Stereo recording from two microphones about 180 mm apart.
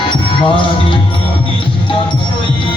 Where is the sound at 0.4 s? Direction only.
25° left (ahead or behind).